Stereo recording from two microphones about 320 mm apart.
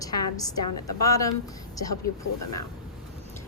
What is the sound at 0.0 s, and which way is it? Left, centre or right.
A woman's voice, centre.